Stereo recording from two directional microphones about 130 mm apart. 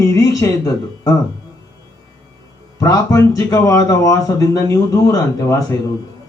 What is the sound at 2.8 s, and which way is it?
Speech, 30° left (ahead or behind).